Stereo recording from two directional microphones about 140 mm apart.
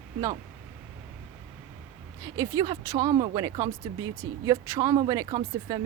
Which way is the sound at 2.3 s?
30° right (ahead or behind).